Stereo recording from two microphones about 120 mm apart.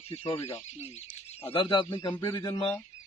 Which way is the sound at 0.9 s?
60° left (ahead or behind).